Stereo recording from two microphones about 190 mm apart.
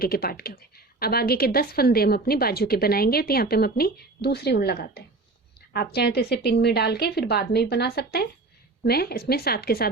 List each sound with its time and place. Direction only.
0.0 s a woman's voice: 50° left (ahead or behind)